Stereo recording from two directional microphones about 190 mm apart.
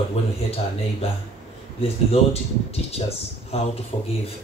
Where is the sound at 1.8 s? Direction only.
35° left (ahead or behind).